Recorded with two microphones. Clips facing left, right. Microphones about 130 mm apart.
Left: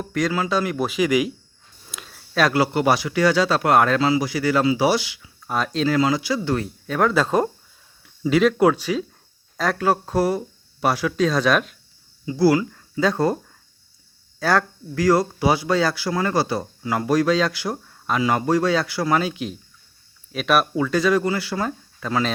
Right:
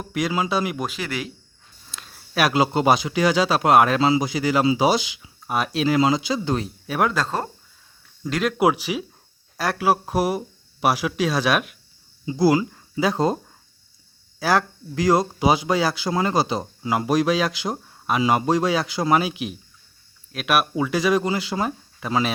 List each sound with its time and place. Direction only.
0.0 s speech: 15° right (ahead or behind)
0.8 s speech: 10° left (ahead or behind)
2.0 s speech: 10° right (ahead or behind)
7.1 s speech: 10° left (ahead or behind)
8.5 s speech: 10° right (ahead or behind)
12.2 s speech: 20° right (ahead or behind)